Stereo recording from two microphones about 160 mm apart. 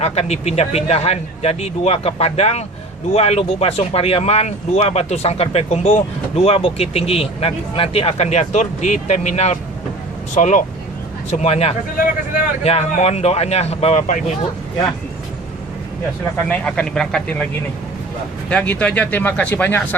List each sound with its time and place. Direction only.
0.0 s speech: 40° left (ahead or behind)
16.5 s speech: 5° left (ahead or behind)
18.4 s speech: 5° left (ahead or behind)